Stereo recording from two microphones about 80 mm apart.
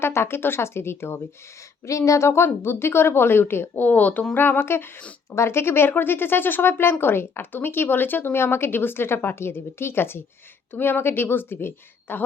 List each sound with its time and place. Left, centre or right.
0.0 s a woman's voice: left